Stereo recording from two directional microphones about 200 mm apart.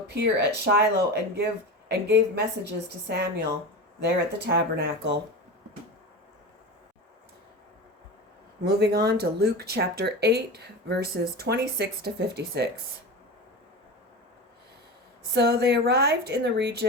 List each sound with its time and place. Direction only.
0.1 s a woman's voice: 55° right (ahead or behind)
8.6 s speech: 55° right (ahead or behind)
15.3 s a woman's voice: 55° right (ahead or behind)